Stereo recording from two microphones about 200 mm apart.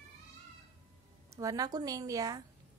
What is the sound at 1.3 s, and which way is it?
A woman's voice, 15° right (ahead or behind).